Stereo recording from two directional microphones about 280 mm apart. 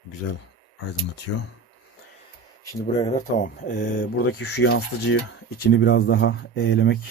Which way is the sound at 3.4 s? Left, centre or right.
Left.